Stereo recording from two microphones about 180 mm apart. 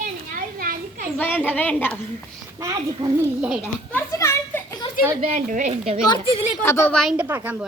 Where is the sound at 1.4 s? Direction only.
10° left (ahead or behind).